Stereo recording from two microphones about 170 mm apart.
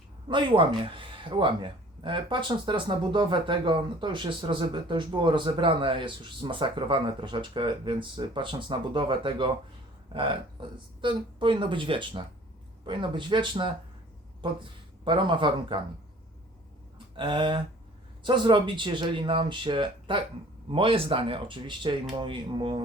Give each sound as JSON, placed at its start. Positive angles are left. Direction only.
{"t": 0.3, "sound": "speech", "side_deg": -30}
{"t": 17.2, "sound": "speech", "side_deg": -30}